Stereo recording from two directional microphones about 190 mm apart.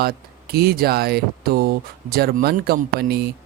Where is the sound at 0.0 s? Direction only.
55° right (ahead or behind).